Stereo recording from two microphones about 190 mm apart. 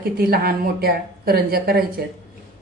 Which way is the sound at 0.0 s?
55° right (ahead or behind).